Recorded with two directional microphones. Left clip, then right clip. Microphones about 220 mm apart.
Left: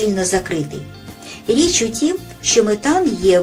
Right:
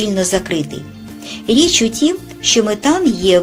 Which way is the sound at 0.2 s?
40° right (ahead or behind).